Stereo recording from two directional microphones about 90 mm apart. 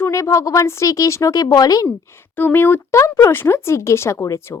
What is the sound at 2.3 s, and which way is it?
Speech, 25° left (ahead or behind).